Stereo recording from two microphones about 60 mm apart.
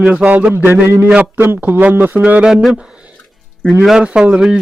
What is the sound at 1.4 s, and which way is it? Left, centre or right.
A man's voice, right.